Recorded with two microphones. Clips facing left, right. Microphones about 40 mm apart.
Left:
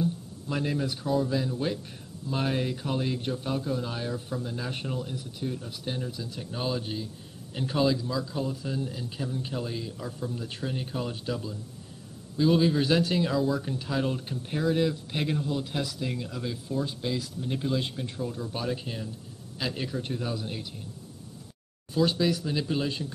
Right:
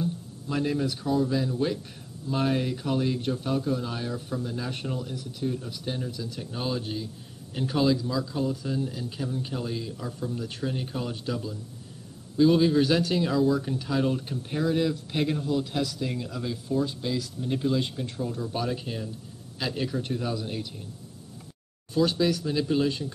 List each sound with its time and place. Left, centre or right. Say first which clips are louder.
0.0 s a man's voice: left 1 dB; centre
6.1 s speech: right 2 dB; centre
6.4 s a man's voice: even; centre
21.9 s a man's voice: right 1 dB; centre